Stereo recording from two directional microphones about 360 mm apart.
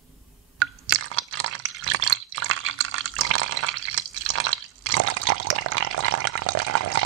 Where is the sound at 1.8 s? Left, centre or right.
Right.